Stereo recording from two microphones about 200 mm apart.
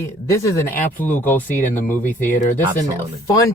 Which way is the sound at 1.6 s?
40° left (ahead or behind).